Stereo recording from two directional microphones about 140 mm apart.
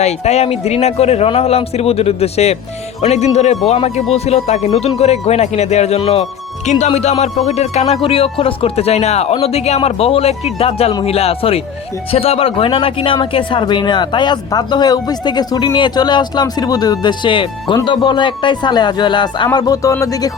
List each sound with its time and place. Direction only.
0.0 s speech: 50° left (ahead or behind); by 20.3 s 25° left (ahead or behind)